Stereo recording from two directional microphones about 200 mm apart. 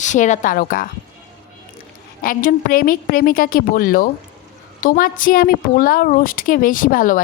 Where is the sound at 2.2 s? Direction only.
45° left (ahead or behind).